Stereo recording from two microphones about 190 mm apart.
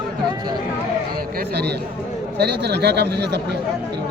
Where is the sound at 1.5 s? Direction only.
60° right (ahead or behind).